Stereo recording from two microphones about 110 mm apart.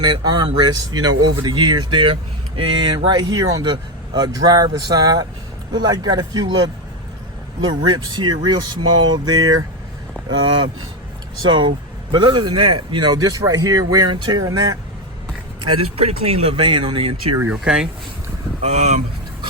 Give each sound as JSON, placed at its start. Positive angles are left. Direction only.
{"t": 0.0, "sound": "speech", "side_deg": -40}
{"t": 7.7, "sound": "a man's voice", "side_deg": -45}
{"t": 15.6, "sound": "a man's voice", "side_deg": -55}
{"t": 17.5, "sound": "speech", "side_deg": -5}
{"t": 18.6, "sound": "speech", "side_deg": -80}